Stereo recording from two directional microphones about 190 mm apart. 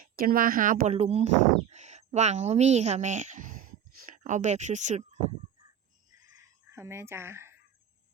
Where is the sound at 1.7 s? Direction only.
35° right (ahead or behind).